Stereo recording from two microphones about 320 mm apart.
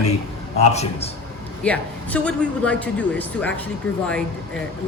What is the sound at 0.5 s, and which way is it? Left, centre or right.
Speech, centre.